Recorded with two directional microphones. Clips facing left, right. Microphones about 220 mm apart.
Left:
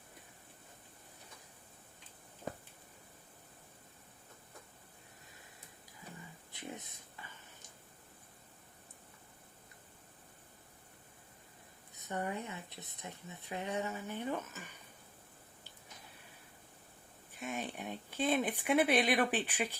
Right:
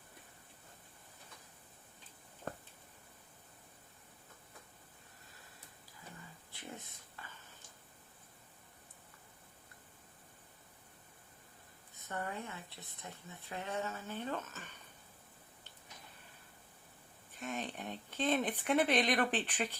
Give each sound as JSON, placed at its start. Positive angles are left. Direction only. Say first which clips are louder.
{"t": 6.5, "sound": "a sound", "louder": "left 3 dB", "side_deg": 20}
{"t": 12.0, "sound": "speech", "louder": "left 3 dB", "side_deg": 20}
{"t": 17.4, "sound": "speech", "louder": "left 1 dB", "side_deg": 10}